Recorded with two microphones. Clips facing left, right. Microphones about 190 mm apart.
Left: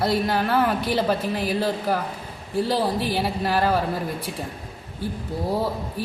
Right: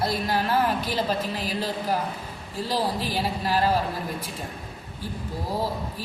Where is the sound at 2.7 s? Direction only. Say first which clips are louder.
Left 1 dB; 60° left (ahead or behind).